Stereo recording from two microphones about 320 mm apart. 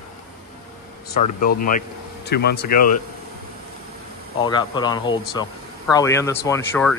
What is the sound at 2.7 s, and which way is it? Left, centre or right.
Speech, left.